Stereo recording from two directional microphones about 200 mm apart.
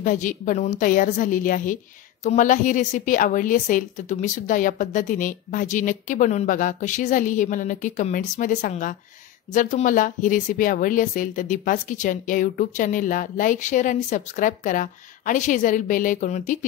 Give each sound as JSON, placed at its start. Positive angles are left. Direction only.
{"t": 0.0, "sound": "speech", "side_deg": 40}